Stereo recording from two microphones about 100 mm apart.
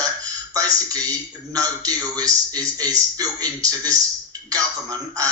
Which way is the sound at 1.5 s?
40° right (ahead or behind).